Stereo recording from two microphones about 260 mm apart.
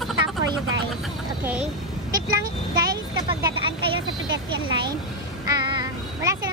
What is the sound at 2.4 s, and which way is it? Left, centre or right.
Speech, centre.